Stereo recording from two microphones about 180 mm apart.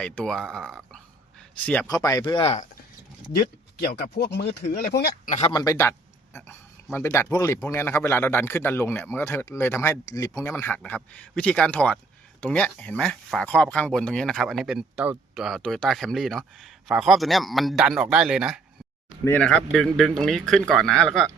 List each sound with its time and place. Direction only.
0.0 s speech: 5° left (ahead or behind)
1.6 s speech: 5° left (ahead or behind)
1.9 s speech: 20° left (ahead or behind)
4.0 s speech: 60° left (ahead or behind)
5.3 s speech: 35° left (ahead or behind)
5.5 s speech: 15° left (ahead or behind)
6.9 s speech: 15° left (ahead or behind); by 18.6 s 5° right (ahead or behind)
19.2 s speech: 10° left (ahead or behind)